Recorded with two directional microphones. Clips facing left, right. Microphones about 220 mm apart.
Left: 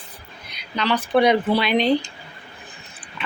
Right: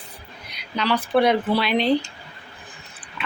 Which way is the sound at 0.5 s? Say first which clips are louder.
Even; 10° right (ahead or behind).